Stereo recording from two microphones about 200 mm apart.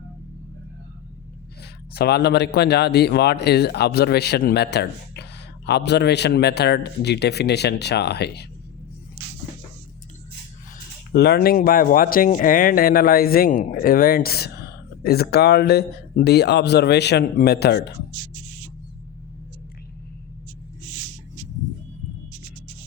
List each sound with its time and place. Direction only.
1.9 s a man's voice: 55° left (ahead or behind)
11.1 s speech: 55° left (ahead or behind)